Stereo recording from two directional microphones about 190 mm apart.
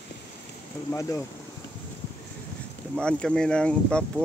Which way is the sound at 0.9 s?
15° left (ahead or behind).